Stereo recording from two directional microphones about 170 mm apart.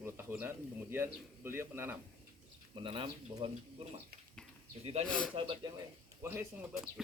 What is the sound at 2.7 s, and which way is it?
Speech, 30° right (ahead or behind).